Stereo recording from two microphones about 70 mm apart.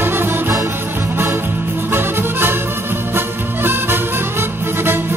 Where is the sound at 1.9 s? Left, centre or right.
Right.